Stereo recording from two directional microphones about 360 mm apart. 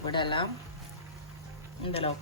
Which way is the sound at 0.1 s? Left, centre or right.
Centre.